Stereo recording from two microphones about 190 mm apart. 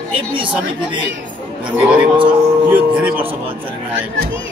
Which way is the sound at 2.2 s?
10° right (ahead or behind).